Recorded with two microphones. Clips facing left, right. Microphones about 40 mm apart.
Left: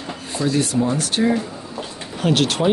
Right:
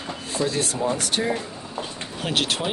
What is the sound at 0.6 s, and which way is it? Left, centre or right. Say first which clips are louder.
Speech: left 4 dB; centre.